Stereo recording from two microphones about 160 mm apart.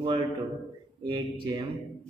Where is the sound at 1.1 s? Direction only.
30° right (ahead or behind).